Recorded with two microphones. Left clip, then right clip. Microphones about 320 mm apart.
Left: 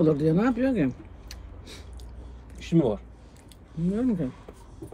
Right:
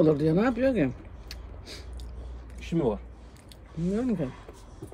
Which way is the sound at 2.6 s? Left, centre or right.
Left.